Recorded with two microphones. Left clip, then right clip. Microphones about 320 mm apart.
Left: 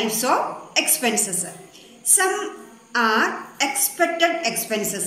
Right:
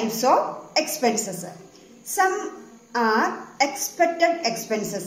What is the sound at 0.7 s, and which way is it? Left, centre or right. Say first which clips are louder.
Speech: left 1 dB; centre.